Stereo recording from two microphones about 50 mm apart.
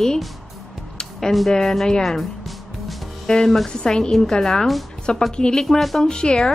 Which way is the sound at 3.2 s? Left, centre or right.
Centre.